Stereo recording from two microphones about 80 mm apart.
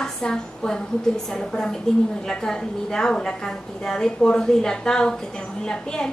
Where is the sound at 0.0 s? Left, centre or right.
Centre.